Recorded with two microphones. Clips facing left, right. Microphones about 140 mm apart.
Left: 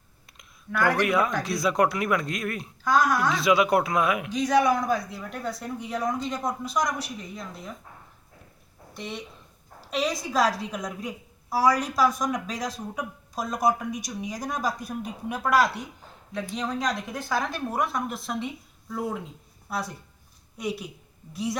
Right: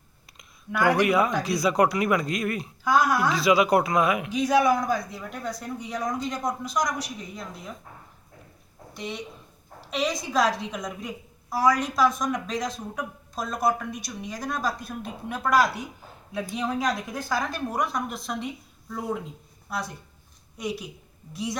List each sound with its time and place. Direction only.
0.7 s speech: 15° right (ahead or behind); by 7.4 s 5° left (ahead or behind)
8.9 s a woman's voice: centre (ahead or behind)